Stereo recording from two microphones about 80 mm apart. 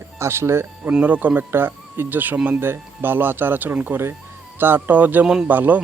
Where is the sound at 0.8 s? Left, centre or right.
Right.